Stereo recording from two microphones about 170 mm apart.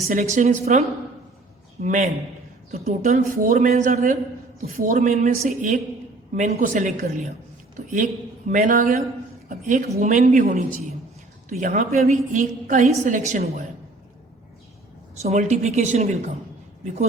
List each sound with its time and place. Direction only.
0.3 s a woman's voice: 40° right (ahead or behind)
8.4 s a woman's voice: 50° right (ahead or behind)
9.5 s a sound: 50° right (ahead or behind)
10.0 s a woman's voice: 50° right (ahead or behind)
15.2 s a woman's voice: 40° right (ahead or behind)